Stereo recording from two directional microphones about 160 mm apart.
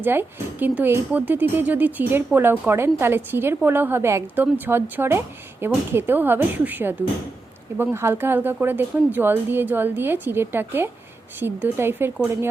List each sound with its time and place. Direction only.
0.0 s speech: 15° right (ahead or behind)